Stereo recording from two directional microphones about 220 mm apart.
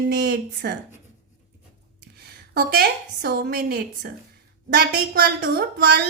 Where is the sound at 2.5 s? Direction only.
45° right (ahead or behind).